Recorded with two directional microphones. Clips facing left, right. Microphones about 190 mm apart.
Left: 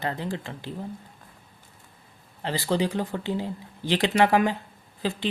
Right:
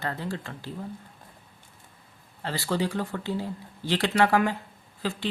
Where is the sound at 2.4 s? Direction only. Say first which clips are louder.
Left 3 dB; 20° left (ahead or behind).